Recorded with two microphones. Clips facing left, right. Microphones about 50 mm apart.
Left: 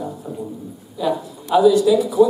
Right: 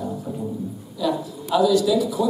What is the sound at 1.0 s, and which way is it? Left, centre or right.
A man's voice, left.